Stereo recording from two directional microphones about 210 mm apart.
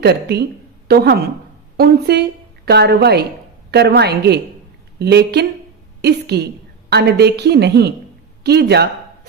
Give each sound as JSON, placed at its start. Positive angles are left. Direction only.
{"t": 0.0, "sound": "a woman's voice", "side_deg": -50}